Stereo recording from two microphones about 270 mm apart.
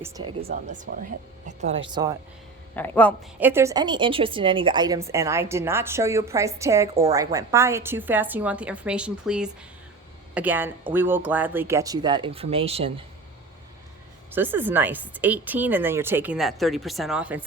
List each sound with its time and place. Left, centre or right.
0.0 s a woman's voice: centre
0.4 s speech: right
1.5 s a woman's voice: right
2.7 s speech: centre
3.4 s a woman's voice: centre
14.3 s a woman's voice: centre